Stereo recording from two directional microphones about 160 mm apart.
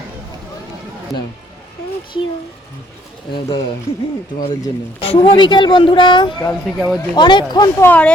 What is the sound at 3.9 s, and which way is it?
Speech, 40° left (ahead or behind).